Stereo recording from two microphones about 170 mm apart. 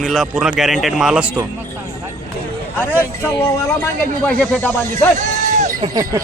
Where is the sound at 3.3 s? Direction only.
15° left (ahead or behind).